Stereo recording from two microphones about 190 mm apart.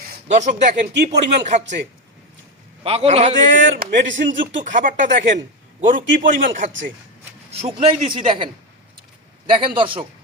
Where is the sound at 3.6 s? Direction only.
75° right (ahead or behind).